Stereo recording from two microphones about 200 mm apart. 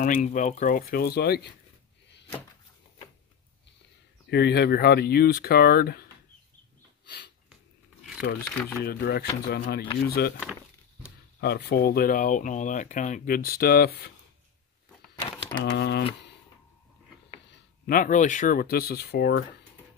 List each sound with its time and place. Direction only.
0.0 s speech: 40° left (ahead or behind)
4.3 s speech: 55° left (ahead or behind)
8.2 s speech: 50° left (ahead or behind)
11.4 s speech: 55° left (ahead or behind)
15.6 s speech: 55° left (ahead or behind)
17.8 s speech: 45° left (ahead or behind)